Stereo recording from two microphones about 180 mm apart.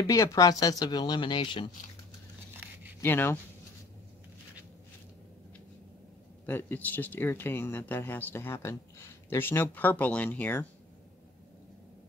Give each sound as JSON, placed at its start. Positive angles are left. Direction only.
{"t": 0.0, "sound": "speech", "side_deg": 15}
{"t": 3.0, "sound": "speech", "side_deg": 10}
{"t": 6.4, "sound": "speech", "side_deg": 10}